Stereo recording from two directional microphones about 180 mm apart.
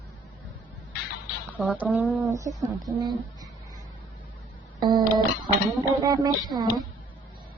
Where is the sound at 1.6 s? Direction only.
10° right (ahead or behind).